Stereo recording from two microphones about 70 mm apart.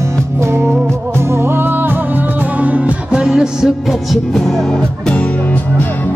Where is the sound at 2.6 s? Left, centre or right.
Centre.